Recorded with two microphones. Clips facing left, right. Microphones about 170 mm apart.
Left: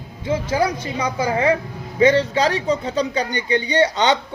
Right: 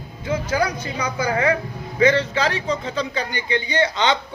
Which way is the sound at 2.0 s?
35° left (ahead or behind).